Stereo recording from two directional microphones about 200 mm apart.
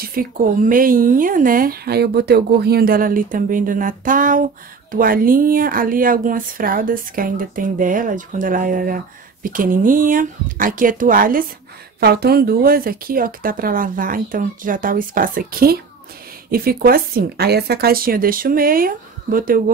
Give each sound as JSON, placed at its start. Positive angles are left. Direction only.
{"t": 0.0, "sound": "speech", "side_deg": -45}